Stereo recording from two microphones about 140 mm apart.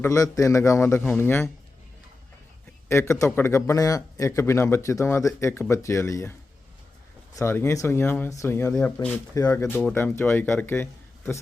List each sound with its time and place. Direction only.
0.0 s a man's voice: 20° left (ahead or behind)
2.9 s a man's voice: 20° left (ahead or behind)
7.3 s speech: 20° left (ahead or behind)
9.3 s a man's voice: 20° left (ahead or behind)